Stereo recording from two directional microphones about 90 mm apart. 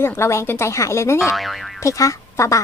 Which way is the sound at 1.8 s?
35° left (ahead or behind).